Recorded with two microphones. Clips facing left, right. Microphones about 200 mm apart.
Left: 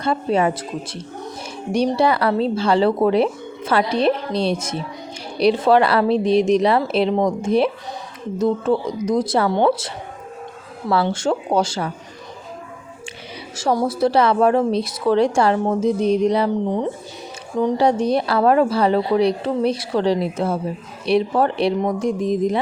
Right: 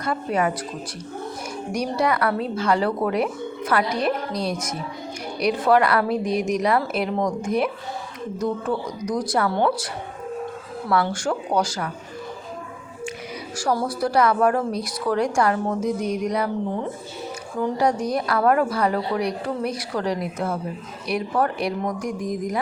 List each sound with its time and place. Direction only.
0.0 s a woman's voice: 25° left (ahead or behind)
1.7 s a woman's voice: 30° left (ahead or behind)
13.6 s a woman's voice: 25° left (ahead or behind)